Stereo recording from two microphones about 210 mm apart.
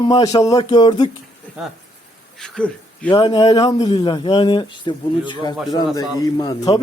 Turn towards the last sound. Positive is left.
turn(degrees=20)  # may be behind; listen again after turning